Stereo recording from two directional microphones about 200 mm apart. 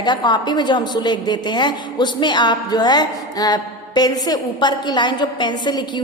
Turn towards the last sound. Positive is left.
turn(degrees=20)  # may be behind; listen again after turning